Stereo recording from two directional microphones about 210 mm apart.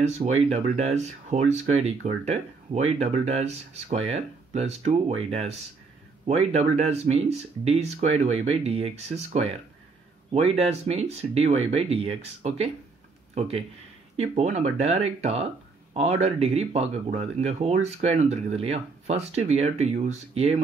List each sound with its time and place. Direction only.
0.0 s speech: 30° right (ahead or behind)